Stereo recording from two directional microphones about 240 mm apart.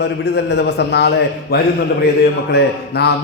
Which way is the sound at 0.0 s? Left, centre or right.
Left.